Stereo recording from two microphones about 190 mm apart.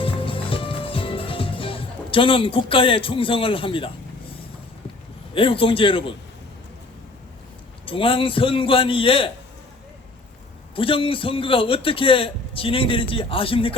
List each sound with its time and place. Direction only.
0.0 s music: 30° left (ahead or behind)
5.3 s a man's voice: 30° left (ahead or behind)
7.9 s a man's voice: 30° left (ahead or behind)
10.8 s a man's voice: 30° left (ahead or behind)